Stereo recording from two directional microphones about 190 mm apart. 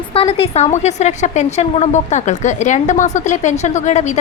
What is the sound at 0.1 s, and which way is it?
A woman's voice, 30° left (ahead or behind).